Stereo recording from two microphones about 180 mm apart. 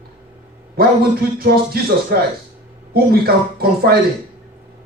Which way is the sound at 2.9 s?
60° right (ahead or behind).